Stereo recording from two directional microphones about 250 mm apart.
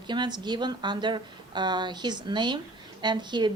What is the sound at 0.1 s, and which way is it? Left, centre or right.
A woman's voice, centre.